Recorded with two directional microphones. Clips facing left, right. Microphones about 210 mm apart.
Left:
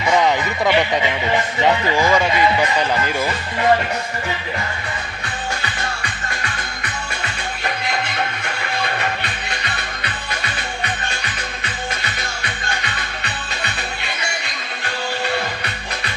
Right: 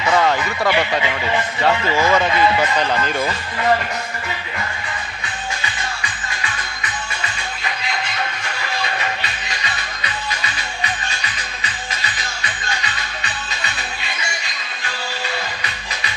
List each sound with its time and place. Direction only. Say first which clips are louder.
0.1 s a sound: left 1 dB; 15° left (ahead or behind)
1.6 s speech: even; 15° left (ahead or behind)
6.4 s music: left 1 dB; 55° left (ahead or behind)
8.8 s music: left 2 dB; 55° left (ahead or behind)
15.6 s music: left 2 dB; 55° left (ahead or behind)